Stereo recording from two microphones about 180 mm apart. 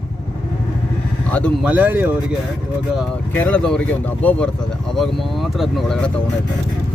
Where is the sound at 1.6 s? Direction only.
10° right (ahead or behind).